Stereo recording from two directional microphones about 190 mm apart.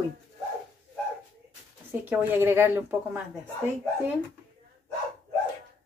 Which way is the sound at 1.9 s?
10° right (ahead or behind).